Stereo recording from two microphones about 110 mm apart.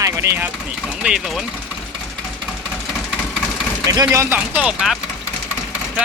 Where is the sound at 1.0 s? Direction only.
5° right (ahead or behind).